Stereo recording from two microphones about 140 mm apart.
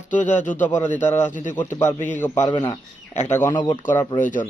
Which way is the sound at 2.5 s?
35° left (ahead or behind).